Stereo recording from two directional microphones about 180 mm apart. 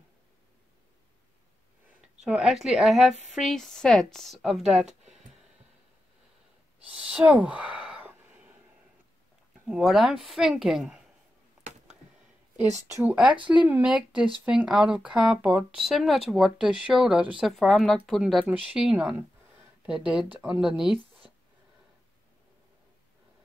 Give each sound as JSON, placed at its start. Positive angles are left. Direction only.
{"t": 2.2, "sound": "speech", "side_deg": 0}
{"t": 6.8, "sound": "a sound", "side_deg": -5}
{"t": 9.7, "sound": "speech", "side_deg": 0}
{"t": 12.8, "sound": "speech", "side_deg": -15}